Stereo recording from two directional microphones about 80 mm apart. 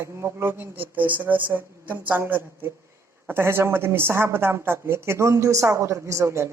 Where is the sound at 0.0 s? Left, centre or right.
Right.